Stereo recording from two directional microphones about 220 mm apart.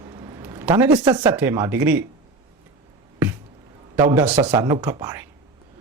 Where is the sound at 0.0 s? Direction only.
15° right (ahead or behind).